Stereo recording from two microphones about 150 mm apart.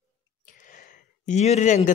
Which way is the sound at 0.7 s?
60° left (ahead or behind).